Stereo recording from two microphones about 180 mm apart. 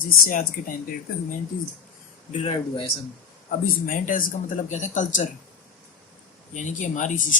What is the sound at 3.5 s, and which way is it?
Speech, 50° left (ahead or behind).